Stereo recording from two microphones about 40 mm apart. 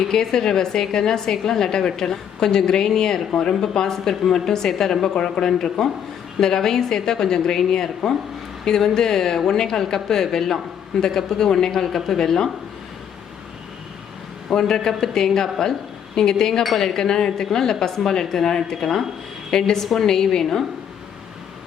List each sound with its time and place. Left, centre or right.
0.1 s a woman's voice: centre
14.5 s a woman's voice: centre